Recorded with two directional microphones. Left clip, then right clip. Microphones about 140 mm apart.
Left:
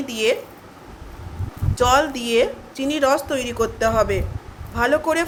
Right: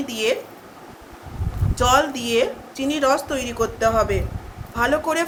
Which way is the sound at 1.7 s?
35° left (ahead or behind).